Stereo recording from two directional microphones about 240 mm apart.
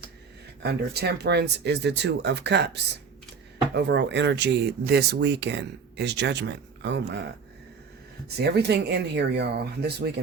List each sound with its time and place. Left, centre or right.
0.6 s speech: right
8.4 s speech: right